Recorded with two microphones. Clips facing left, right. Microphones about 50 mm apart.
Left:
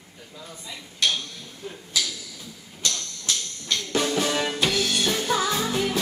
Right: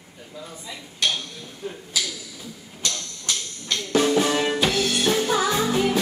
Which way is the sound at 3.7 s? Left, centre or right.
Centre.